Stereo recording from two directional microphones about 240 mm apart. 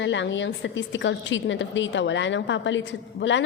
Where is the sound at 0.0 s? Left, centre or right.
Left.